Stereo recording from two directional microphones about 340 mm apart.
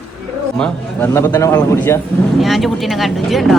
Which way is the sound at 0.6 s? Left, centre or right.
Centre.